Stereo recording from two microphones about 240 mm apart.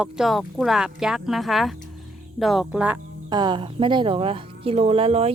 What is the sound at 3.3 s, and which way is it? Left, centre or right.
A woman's voice, centre.